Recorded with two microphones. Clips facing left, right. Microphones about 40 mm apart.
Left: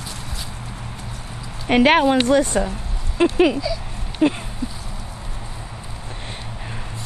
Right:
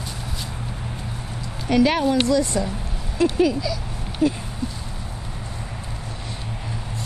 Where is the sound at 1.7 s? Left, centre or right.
Left.